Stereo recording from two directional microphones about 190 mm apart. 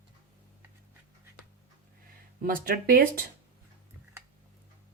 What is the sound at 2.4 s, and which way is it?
Speech, 50° right (ahead or behind).